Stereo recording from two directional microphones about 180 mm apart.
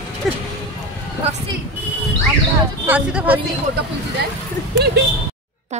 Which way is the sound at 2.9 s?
10° right (ahead or behind).